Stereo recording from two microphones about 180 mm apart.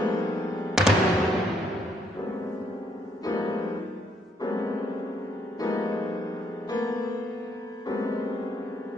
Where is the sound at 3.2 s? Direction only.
20° left (ahead or behind).